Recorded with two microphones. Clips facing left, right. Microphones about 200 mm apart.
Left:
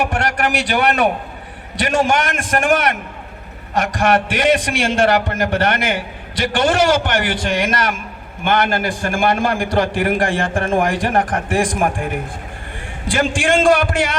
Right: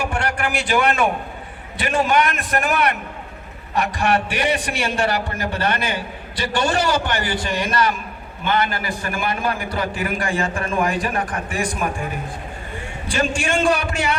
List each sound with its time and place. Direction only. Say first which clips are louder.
0.0 s a man's voice: left 4 dB; 70° left (ahead or behind)
1.7 s a man's voice: left 2 dB; 80° left
2.7 s a man's voice: left 2 dB; 80° left